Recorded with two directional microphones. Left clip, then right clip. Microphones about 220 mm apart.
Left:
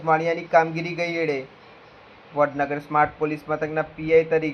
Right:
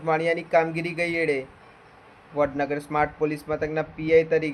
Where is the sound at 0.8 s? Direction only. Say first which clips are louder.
Even; 50° right (ahead or behind).